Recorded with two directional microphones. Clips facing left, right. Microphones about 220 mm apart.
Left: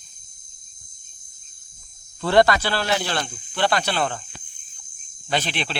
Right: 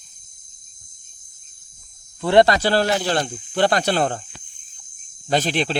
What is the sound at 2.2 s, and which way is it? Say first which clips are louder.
Speech: right 2 dB; 20° right (ahead or behind).